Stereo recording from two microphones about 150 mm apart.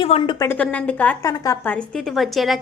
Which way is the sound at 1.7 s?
5° left (ahead or behind).